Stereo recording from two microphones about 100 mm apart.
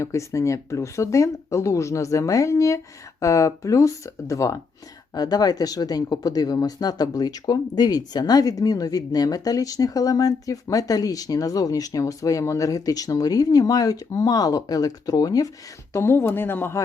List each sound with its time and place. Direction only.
0.0 s speech: 30° left (ahead or behind)
5.1 s speech: 40° left (ahead or behind)
15.9 s speech: 25° left (ahead or behind)